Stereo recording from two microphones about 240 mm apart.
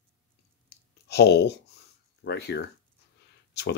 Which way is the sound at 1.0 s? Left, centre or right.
Left.